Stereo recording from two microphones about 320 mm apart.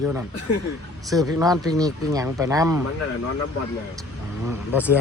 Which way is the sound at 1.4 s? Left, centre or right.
Centre.